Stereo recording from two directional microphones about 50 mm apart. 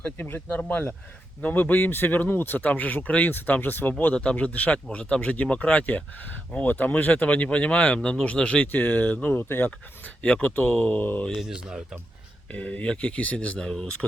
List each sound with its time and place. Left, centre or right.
0.2 s speech: left
4.1 s speech: left
8.7 s speech: left
9.3 s speech: left
11.4 s speech: centre
12.5 s speech: left
13.6 s speech: centre